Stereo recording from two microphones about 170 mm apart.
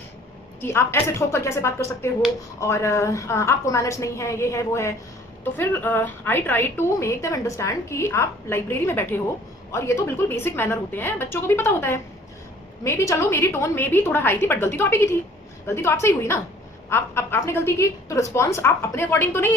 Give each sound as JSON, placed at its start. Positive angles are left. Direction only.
{"t": 0.6, "sound": "a woman's voice", "side_deg": 15}